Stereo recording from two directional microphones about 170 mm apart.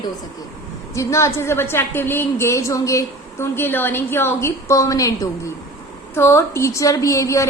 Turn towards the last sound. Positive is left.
turn(degrees=15)  # may be behind; listen again after turning